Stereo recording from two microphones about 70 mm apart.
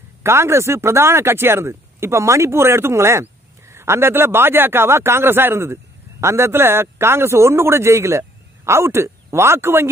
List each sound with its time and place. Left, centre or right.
0.2 s speech: right